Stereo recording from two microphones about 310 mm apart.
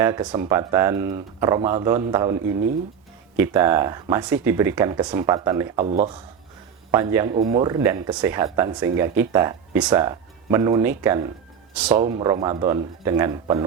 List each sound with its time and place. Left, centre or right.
0.0 s speech: centre
6.9 s speech: centre
11.9 s speech: centre